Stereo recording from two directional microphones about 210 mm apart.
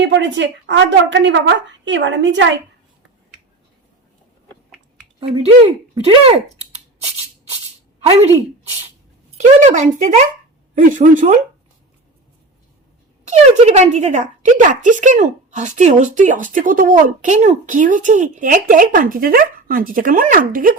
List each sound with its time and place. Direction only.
0.0 s a woman's voice: 60° right (ahead or behind)
5.2 s speech: 25° right (ahead or behind)
9.6 s speech: 35° right (ahead or behind)
13.2 s speech: 30° right (ahead or behind)